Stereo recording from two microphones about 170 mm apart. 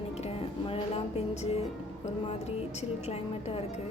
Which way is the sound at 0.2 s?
35° left (ahead or behind).